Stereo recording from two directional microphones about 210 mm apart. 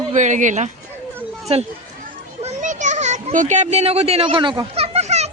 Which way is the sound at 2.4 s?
35° right (ahead or behind).